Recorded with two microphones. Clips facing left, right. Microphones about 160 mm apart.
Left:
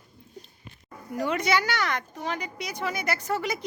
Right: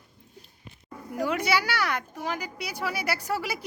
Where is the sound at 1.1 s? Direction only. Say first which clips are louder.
Left 1 dB; 5° right (ahead or behind).